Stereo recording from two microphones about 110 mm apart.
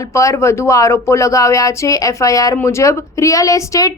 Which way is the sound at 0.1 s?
30° left (ahead or behind).